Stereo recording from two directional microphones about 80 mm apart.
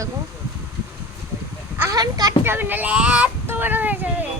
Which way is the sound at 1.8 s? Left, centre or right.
Right.